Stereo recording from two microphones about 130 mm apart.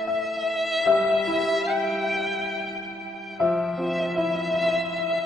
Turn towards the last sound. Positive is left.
turn(degrees=0)  # may be behind; listen again after turning